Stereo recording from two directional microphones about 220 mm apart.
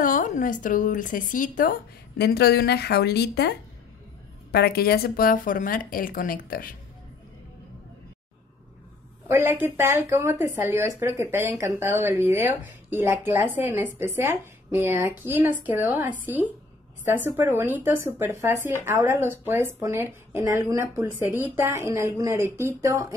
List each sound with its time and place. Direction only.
0.0 s a woman's voice: 35° left (ahead or behind)
9.3 s speech: 10° right (ahead or behind)